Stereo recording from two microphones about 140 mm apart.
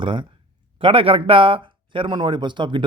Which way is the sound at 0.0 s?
35° right (ahead or behind).